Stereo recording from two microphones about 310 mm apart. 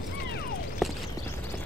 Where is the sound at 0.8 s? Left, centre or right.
Centre.